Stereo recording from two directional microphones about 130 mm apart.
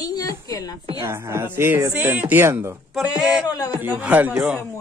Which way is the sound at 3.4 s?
30° left (ahead or behind).